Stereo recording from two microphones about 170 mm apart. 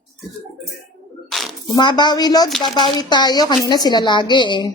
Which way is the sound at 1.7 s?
25° left (ahead or behind).